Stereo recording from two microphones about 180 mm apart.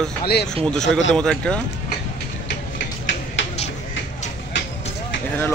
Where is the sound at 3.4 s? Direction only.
90° left.